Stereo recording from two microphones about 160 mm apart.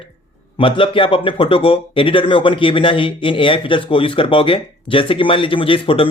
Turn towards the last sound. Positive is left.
turn(degrees=35)  # may be behind; listen again after turning